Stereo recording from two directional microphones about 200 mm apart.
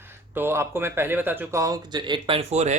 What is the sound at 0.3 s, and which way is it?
Speech, 10° right (ahead or behind).